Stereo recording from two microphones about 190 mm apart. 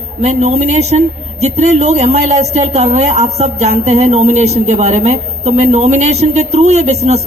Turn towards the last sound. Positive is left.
turn(degrees=-35)  # may be behind; listen again after turning